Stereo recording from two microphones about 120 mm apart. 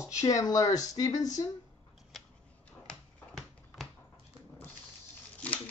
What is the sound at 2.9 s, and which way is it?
Finger snapping, 5° left (ahead or behind).